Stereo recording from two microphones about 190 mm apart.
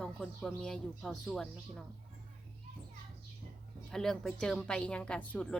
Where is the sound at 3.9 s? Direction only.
Centre (ahead or behind).